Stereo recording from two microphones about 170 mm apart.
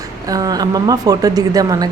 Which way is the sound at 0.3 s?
20° right (ahead or behind).